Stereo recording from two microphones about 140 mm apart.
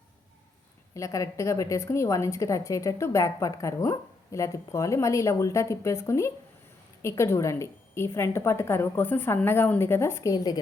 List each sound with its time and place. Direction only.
0.9 s a woman's voice: 20° left (ahead or behind)